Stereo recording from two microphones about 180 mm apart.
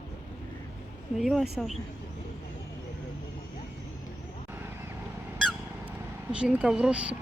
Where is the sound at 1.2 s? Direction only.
Centre (ahead or behind).